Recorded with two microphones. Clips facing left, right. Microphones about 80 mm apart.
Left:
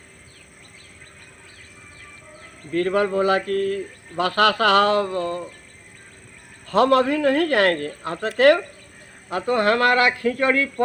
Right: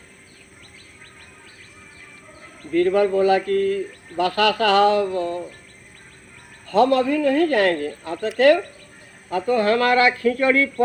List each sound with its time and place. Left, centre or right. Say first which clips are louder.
2.7 s speech: right 3 dB; left
4.2 s speech: even; left
6.7 s speech: even; left
9.3 s speech: right 1 dB; left
10.2 s speech: right 2 dB; left